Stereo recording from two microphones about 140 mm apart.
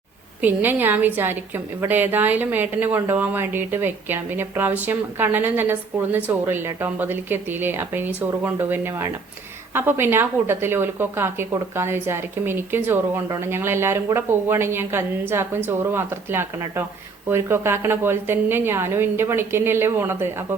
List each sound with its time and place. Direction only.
0.4 s a woman's voice: 15° right (ahead or behind)